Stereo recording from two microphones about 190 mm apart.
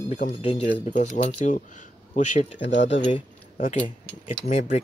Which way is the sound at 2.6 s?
70° left (ahead or behind).